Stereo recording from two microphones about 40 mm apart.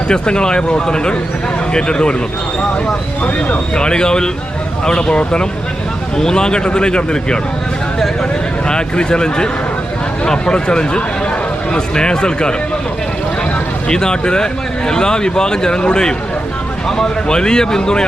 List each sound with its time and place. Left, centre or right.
0.1 s speech: left
3.8 s speech: centre
8.6 s speech: left
13.8 s speech: left